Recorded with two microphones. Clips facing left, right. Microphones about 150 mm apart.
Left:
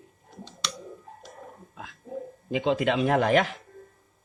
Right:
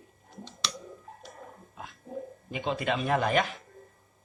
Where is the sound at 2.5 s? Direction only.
90° left.